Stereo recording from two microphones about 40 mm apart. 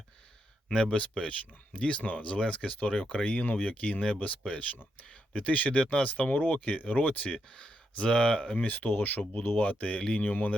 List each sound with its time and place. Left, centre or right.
0.9 s speech: left
3.0 s speech: left
3.4 s speech: left
7.5 s speech: left
8.5 s speech: left
8.9 s speech: left
10.2 s speech: left